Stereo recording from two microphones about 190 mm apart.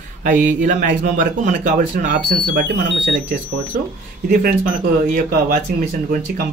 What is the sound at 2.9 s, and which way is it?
Speech, 65° right (ahead or behind).